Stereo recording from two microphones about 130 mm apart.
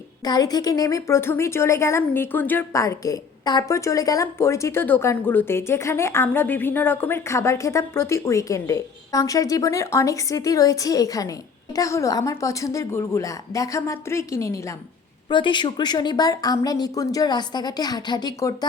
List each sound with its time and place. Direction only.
0.3 s a woman's voice: 30° left (ahead or behind); by 2.8 s 15° left (ahead or behind)
2.8 s a woman's voice: 25° left (ahead or behind)
15.3 s a woman's voice: 35° left (ahead or behind)